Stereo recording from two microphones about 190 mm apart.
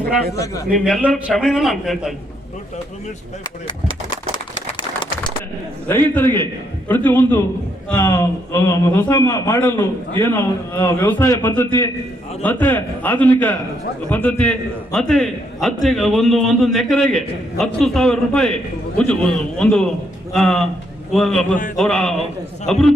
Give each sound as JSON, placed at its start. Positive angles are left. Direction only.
{"t": 0.3, "sound": "a man's voice", "side_deg": 15}
{"t": 0.7, "sound": "a man's voice", "side_deg": 5}
{"t": 5.9, "sound": "a man's voice", "side_deg": 10}